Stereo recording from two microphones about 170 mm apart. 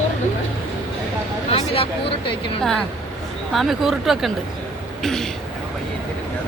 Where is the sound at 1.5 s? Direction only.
35° left (ahead or behind).